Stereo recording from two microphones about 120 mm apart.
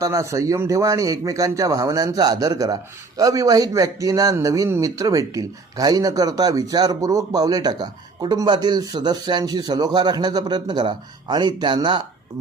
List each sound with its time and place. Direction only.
0.0 s a man's voice: 25° right (ahead or behind)